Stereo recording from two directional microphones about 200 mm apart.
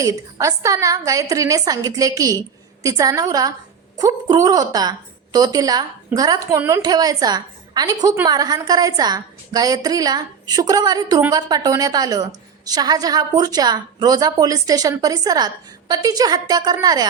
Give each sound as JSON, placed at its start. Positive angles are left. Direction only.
{"t": 0.0, "sound": "a woman's voice", "side_deg": -15}